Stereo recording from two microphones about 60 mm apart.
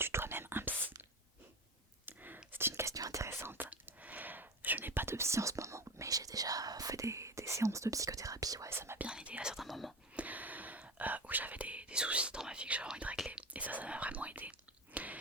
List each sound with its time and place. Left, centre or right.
0.0 s whispering: right
2.0 s whispering: right
2.9 s whispering: right
3.2 s whispering: right
3.8 s whispering: right
8.7 s whispering: right
9.0 s whispering: centre
9.6 s whispering: centre
10.2 s whispering: right
14.9 s chewing: right